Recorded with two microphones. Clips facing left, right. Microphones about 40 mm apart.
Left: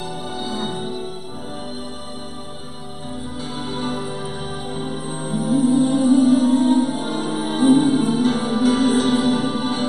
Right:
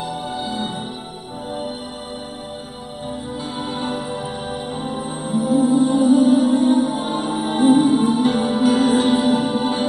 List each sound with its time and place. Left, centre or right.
0.4 s music: right
3.5 s music: right
5.4 s music: centre